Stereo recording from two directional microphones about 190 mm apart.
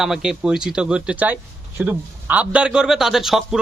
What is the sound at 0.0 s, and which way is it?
Speech, 5° right (ahead or behind).